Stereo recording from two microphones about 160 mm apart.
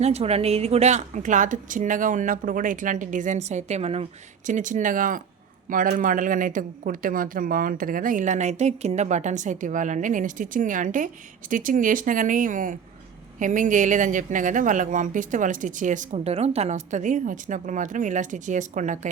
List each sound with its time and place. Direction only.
0.0 s speech: 40° right (ahead or behind)
4.4 s speech: 50° right (ahead or behind)